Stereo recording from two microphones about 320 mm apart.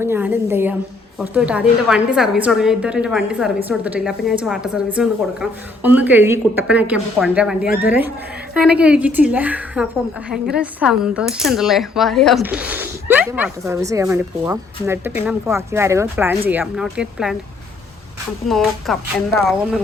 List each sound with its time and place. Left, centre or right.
0.0 s a sound: centre
1.2 s speech: centre
18.4 s speech: centre